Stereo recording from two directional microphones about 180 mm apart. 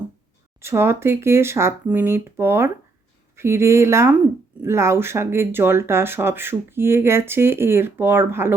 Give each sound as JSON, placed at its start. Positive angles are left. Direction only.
{"t": 0.6, "sound": "speech", "side_deg": -15}